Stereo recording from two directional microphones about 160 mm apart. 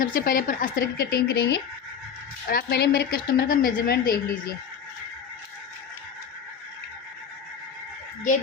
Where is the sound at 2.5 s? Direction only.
70° left (ahead or behind).